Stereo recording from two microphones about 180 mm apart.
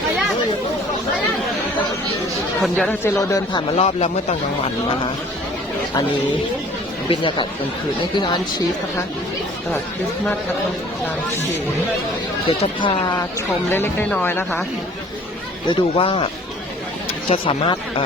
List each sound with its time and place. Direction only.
2.6 s speech: centre (ahead or behind)
3.0 s speech: 15° left (ahead or behind)
3.8 s speech: 35° left (ahead or behind)
7.1 s speech: 25° left (ahead or behind)
12.5 s speech: 35° left (ahead or behind)
13.7 s speech: 10° left (ahead or behind)
15.7 s speech: 30° left (ahead or behind)